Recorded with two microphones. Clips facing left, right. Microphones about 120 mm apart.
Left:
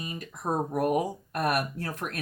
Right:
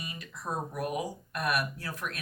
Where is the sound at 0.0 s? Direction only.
40° left (ahead or behind).